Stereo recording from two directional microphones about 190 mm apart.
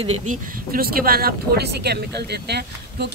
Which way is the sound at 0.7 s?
50° right (ahead or behind).